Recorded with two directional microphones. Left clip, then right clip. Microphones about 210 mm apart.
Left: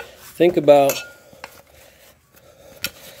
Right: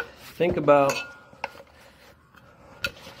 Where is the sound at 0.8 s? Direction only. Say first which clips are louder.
Left 4 dB; 15° left (ahead or behind).